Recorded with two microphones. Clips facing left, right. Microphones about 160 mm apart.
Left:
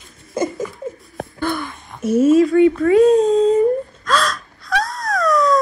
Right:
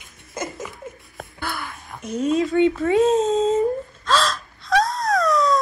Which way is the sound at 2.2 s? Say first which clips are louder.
Left 6 dB; centre (ahead or behind).